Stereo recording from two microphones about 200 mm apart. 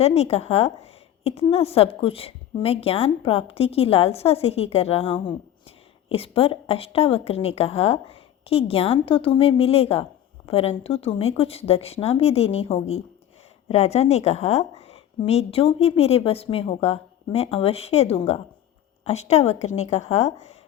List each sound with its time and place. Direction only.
0.0 s a woman's voice: 30° left (ahead or behind)